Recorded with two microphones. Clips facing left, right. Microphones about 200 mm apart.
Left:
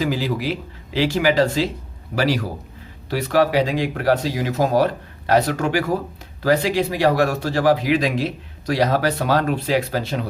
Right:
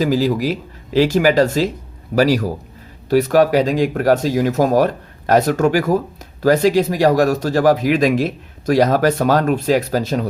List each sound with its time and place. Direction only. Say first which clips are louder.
0.0 s speech: right 6 dB; 40° right (ahead or behind)